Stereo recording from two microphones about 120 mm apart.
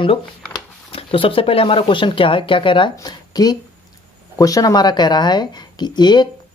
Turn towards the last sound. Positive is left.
turn(degrees=35)  # may be behind; listen again after turning